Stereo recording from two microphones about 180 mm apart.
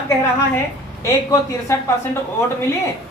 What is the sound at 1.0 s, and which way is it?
Speech, 20° left (ahead or behind).